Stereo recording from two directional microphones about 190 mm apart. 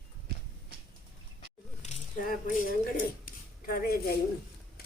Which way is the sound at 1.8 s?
40° left (ahead or behind).